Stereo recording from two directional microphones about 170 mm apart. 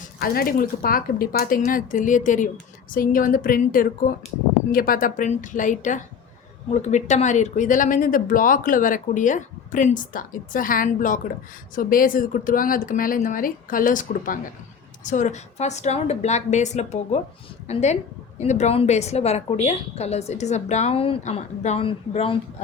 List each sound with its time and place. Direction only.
0.2 s a woman's voice: 60° left (ahead or behind); by 22.4 s 35° left (ahead or behind)